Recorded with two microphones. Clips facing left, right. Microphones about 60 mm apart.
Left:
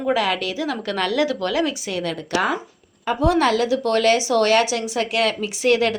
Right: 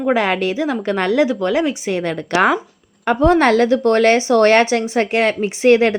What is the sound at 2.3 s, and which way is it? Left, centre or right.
Speech, right.